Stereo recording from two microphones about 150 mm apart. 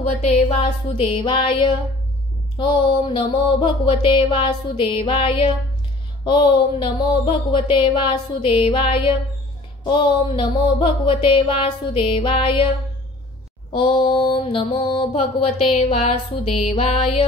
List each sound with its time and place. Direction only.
0.0 s mantra: 45° left (ahead or behind)
13.7 s mantra: 35° left (ahead or behind)